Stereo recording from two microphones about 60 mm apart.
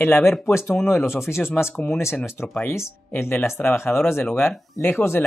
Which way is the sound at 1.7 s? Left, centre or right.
Left.